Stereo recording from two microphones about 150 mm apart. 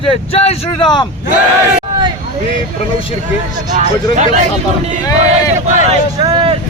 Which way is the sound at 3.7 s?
55° right (ahead or behind).